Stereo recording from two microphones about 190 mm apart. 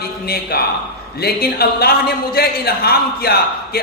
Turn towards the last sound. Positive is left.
turn(degrees=55)  # may be behind; listen again after turning